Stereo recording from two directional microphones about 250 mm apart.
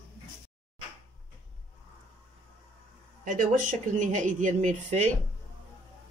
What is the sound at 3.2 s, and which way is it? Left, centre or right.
Speech, right.